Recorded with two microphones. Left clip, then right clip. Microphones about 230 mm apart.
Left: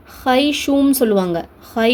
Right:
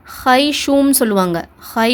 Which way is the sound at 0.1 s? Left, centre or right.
Right.